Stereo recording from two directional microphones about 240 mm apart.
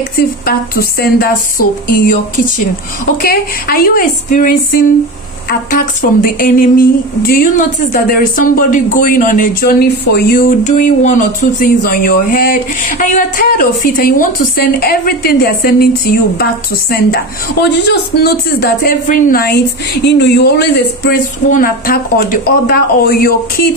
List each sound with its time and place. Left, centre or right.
0.2 s speech: left
3.2 s speech: left